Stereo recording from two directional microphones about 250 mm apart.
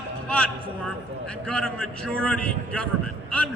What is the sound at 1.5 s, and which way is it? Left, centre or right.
A man's voice, centre.